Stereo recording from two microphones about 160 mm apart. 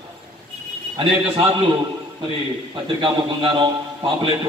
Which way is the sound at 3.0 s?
30° right (ahead or behind).